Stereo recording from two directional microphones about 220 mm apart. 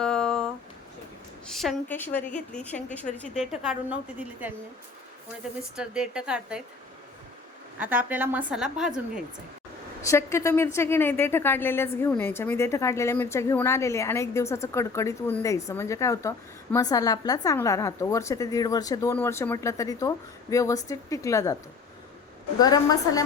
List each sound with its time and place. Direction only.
0.0 s a sound: 5° left (ahead or behind)
1.5 s a woman's voice: centre (ahead or behind)
5.7 s a woman's voice: 5° right (ahead or behind)
7.8 s a woman's voice: 5° right (ahead or behind)
10.1 s a woman's voice: 15° left (ahead or behind)
22.6 s a woman's voice: 15° left (ahead or behind)